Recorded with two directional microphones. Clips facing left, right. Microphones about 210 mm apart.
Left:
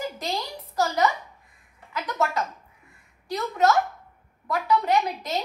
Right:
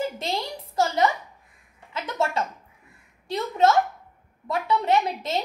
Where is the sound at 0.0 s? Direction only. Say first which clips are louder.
Right 2 dB; 25° right (ahead or behind).